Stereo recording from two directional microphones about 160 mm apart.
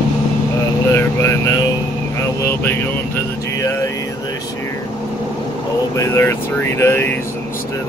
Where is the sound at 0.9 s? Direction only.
15° left (ahead or behind).